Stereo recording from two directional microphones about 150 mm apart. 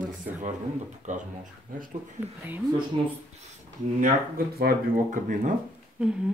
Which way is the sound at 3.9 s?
70° right (ahead or behind).